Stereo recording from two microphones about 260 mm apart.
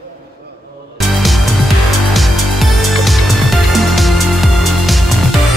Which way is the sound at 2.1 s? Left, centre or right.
Centre.